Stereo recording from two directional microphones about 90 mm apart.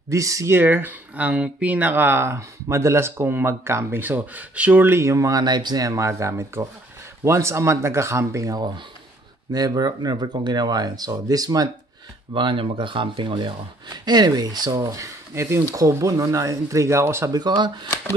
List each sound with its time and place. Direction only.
0.1 s speech: 35° right (ahead or behind)
0.6 s speech: 25° right (ahead or behind)
5.4 s speech: 55° right (ahead or behind); by 8.5 s 35° right (ahead or behind)
9.5 s speech: 45° right (ahead or behind)
12.4 s speech: 70° right (ahead or behind)
13.8 s speech: 50° right (ahead or behind); by 17.3 s 30° right (ahead or behind)
17.3 s speech: 50° right (ahead or behind)